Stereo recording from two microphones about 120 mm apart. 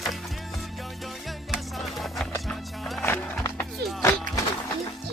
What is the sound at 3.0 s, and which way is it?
Music, 25° left (ahead or behind).